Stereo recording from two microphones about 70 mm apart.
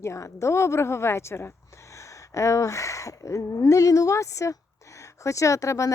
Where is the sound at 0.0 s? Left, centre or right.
Left.